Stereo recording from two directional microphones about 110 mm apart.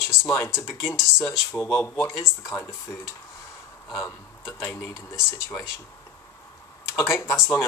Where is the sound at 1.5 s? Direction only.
20° left (ahead or behind).